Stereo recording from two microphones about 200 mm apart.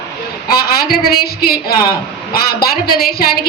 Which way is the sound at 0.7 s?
50° left (ahead or behind).